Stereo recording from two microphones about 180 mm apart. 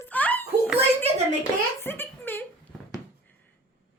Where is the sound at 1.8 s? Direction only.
10° left (ahead or behind).